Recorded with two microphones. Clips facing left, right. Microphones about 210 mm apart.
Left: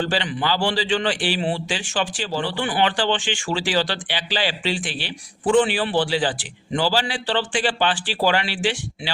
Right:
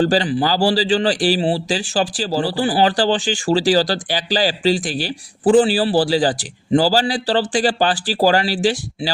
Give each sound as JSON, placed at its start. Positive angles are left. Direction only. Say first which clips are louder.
{"t": 0.0, "sound": "a man's voice", "louder": "right 7 dB", "side_deg": -40}